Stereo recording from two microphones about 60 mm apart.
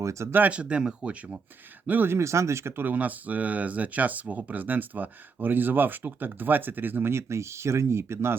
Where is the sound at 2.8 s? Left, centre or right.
Right.